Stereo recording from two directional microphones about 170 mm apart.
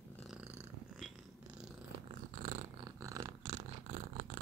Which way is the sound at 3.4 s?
45° right (ahead or behind).